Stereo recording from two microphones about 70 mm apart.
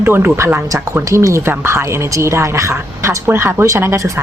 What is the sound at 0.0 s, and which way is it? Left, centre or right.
Speech, right.